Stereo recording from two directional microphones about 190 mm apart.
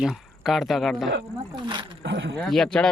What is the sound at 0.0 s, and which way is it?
Speech, centre (ahead or behind).